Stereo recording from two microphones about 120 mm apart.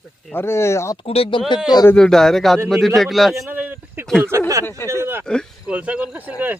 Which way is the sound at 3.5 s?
15° right (ahead or behind).